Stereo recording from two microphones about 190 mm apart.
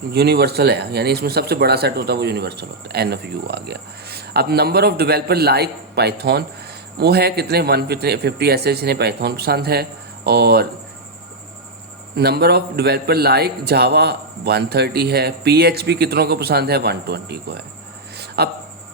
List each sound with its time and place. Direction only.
0.1 s speech: 60° right (ahead or behind)
12.1 s speech: 55° right (ahead or behind)